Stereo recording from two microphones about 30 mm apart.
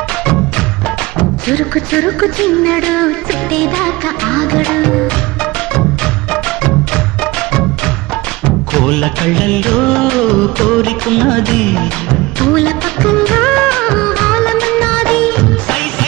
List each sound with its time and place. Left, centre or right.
1.5 s music: left
8.5 s music: left